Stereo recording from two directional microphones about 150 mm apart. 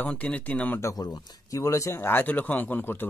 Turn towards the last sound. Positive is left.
turn(degrees=15)  # may be behind; listen again after turning